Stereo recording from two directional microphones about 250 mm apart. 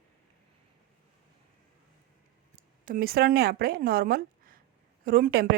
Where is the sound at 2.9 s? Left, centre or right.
Right.